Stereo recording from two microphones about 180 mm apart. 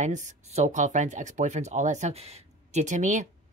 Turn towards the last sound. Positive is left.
turn(degrees=-45)  # may be behind; listen again after turning